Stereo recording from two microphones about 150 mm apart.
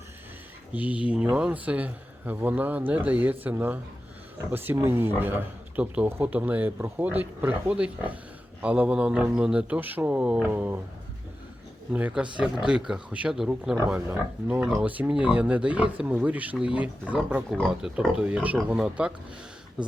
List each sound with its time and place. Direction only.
0.7 s speech: 10° right (ahead or behind)
11.9 s speech: 10° right (ahead or behind)